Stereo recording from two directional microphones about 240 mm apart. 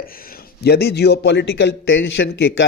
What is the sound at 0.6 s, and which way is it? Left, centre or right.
Speech, left.